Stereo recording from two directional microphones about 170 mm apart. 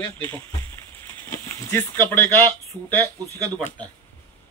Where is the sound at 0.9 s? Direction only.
15° left (ahead or behind).